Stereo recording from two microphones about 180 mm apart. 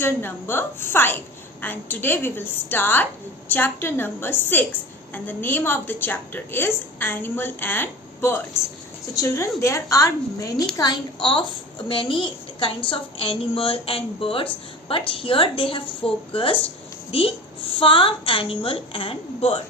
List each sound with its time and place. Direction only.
0.0 s a woman's voice: 10° left (ahead or behind); by 19.6 s 30° left (ahead or behind)